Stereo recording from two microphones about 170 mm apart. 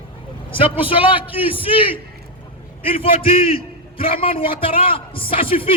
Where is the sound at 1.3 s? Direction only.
10° right (ahead or behind).